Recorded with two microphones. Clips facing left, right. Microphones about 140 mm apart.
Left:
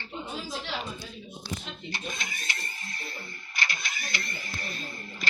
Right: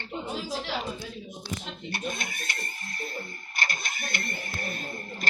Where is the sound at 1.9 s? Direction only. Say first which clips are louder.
Right 4 dB; 55° right (ahead or behind).